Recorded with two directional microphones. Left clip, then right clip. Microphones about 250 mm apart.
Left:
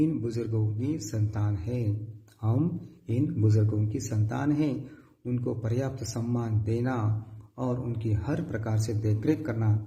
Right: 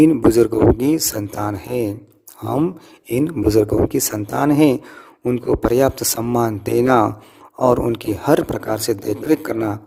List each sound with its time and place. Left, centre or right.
0.0 s speech: right
3.1 s speech: right